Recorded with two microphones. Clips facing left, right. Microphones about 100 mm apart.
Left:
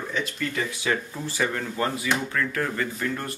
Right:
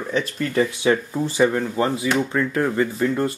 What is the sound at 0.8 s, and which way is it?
Speech, 20° right (ahead or behind).